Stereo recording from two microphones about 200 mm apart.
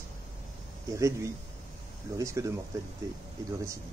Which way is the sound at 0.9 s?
15° right (ahead or behind).